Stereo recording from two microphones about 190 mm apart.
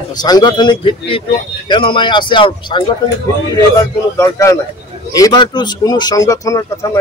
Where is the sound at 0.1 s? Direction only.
20° left (ahead or behind).